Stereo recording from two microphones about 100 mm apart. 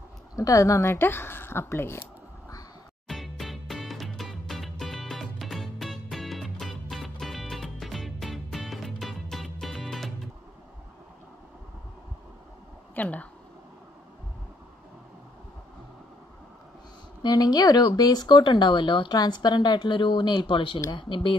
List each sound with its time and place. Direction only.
0.4 s speech: 35° left (ahead or behind)
3.1 s music: centre (ahead or behind)
12.9 s a sound: 15° left (ahead or behind)
17.2 s speech: 40° left (ahead or behind); by 21.4 s 60° left (ahead or behind)